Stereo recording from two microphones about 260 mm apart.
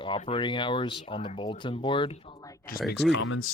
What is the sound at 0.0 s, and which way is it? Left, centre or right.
Speech, centre.